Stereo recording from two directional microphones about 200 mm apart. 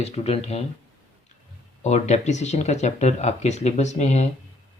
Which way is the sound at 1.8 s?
35° left (ahead or behind).